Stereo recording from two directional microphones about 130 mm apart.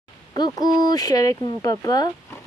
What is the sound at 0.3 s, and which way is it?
Speech, 30° left (ahead or behind).